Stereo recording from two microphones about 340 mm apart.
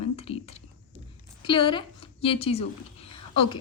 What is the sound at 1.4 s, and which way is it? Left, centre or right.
A woman's voice, centre.